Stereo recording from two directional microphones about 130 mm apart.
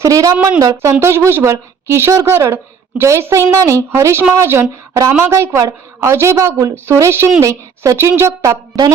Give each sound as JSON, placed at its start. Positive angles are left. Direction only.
{"t": 0.0, "sound": "a woman's voice", "side_deg": -25}